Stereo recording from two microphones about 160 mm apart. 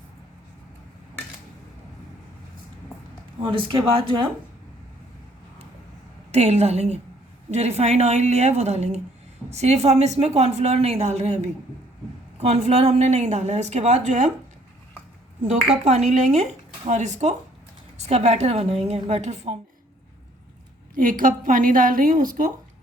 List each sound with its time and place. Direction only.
3.4 s speech: 30° right (ahead or behind)
6.3 s a woman's voice: 40° right (ahead or behind)
12.4 s a woman's voice: 40° right (ahead or behind)
15.4 s a woman's voice: 45° right (ahead or behind)
20.9 s a woman's voice: 60° right (ahead or behind)